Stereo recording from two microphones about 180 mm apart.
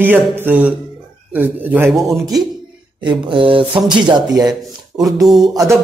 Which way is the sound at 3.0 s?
30° right (ahead or behind).